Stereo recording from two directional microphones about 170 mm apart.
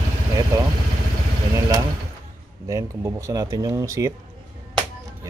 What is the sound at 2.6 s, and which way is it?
Speech, 20° right (ahead or behind).